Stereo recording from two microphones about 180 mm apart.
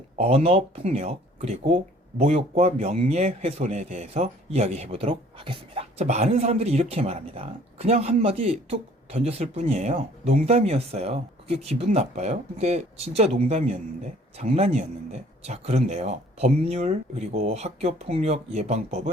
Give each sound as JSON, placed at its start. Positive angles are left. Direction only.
{"t": 0.2, "sound": "speech", "side_deg": -35}